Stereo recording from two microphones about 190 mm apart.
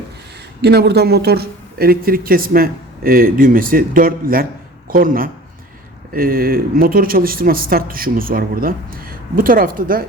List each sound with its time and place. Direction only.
0.6 s speech: 60° right (ahead or behind)